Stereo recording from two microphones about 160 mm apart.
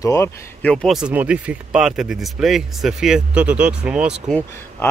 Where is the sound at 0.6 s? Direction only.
5° left (ahead or behind).